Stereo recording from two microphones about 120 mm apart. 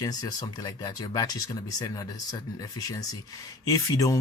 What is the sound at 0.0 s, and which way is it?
Speech, 35° left (ahead or behind).